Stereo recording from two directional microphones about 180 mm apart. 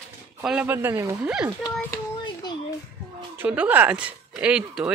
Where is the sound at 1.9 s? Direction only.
20° left (ahead or behind).